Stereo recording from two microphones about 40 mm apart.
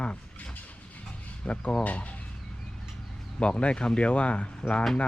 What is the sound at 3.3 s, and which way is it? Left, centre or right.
Speech, left.